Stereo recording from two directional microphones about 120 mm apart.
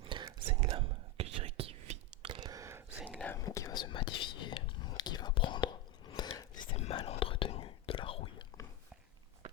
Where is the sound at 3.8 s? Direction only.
40° left (ahead or behind).